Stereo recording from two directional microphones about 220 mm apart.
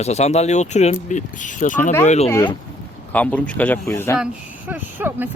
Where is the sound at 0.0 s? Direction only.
30° left (ahead or behind).